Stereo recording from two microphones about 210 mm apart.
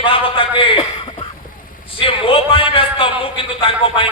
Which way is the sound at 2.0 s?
25° left (ahead or behind).